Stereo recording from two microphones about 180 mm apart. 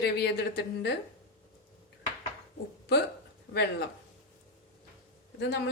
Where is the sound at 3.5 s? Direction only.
65° left (ahead or behind).